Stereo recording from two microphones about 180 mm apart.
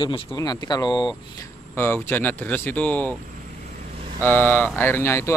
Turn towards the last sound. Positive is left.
turn(degrees=15)  # may be behind; listen again after turning